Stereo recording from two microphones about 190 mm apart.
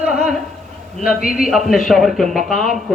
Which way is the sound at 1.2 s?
Centre (ahead or behind).